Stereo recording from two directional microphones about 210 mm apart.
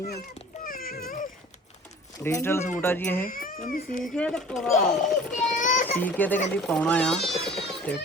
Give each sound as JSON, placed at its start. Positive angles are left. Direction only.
{"t": 0.6, "sound": "a sound", "side_deg": 45}
{"t": 2.2, "sound": "speech", "side_deg": 10}
{"t": 3.2, "sound": "speech", "side_deg": 45}
{"t": 4.0, "sound": "a child's voice", "side_deg": 0}
{"t": 5.5, "sound": "a sound", "side_deg": 35}
{"t": 6.0, "sound": "speech", "side_deg": 10}